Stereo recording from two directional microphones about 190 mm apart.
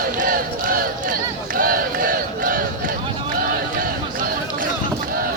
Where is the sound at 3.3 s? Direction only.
50° right (ahead or behind).